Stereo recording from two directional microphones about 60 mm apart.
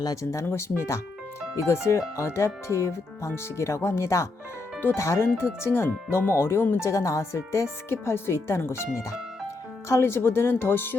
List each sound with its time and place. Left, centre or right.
0.0 s speech: left
0.3 s speech: left
9.9 s speech: left